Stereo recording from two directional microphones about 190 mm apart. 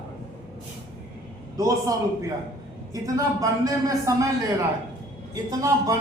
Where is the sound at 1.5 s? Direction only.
20° right (ahead or behind).